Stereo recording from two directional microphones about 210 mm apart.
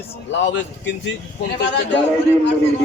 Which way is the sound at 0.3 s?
60° left (ahead or behind).